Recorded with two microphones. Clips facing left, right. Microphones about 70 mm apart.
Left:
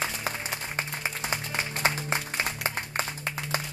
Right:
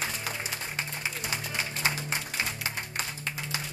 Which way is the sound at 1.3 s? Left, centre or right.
Left.